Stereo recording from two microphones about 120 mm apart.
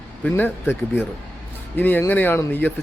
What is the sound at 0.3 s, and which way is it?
A man's voice, 15° left (ahead or behind).